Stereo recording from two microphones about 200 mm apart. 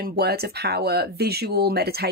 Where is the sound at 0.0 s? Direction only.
50° right (ahead or behind).